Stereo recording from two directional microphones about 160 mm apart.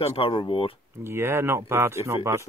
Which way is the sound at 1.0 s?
15° right (ahead or behind).